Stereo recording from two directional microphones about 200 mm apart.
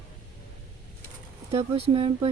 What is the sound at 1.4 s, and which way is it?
Speech, 30° right (ahead or behind).